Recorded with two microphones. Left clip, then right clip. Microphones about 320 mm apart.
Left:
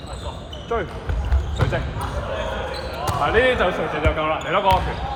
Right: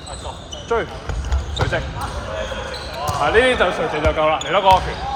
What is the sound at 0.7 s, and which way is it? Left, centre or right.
Speech, right.